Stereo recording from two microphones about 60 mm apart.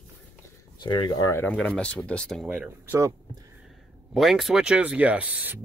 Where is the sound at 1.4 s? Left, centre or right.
Left.